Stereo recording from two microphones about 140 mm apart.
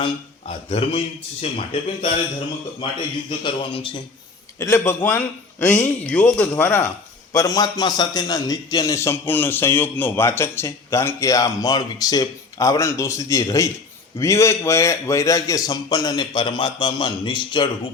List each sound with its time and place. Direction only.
0.4 s a man's voice: 45° left (ahead or behind)
3.2 s speech: 35° left (ahead or behind)
4.6 s a man's voice: 20° left (ahead or behind)
7.3 s a man's voice: 25° left (ahead or behind)